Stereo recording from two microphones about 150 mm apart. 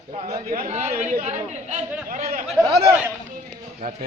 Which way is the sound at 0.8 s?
50° right (ahead or behind).